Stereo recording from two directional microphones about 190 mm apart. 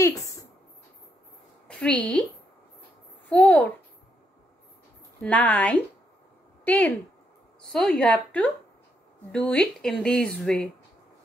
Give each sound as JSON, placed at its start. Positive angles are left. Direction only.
{"t": 0.0, "sound": "a sound", "side_deg": 15}
{"t": 1.7, "sound": "a woman's voice", "side_deg": 5}
{"t": 3.3, "sound": "a child's voice", "side_deg": 5}
{"t": 5.2, "sound": "a woman's voice", "side_deg": 10}